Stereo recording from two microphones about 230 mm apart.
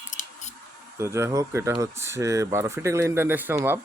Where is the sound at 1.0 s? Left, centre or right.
Centre.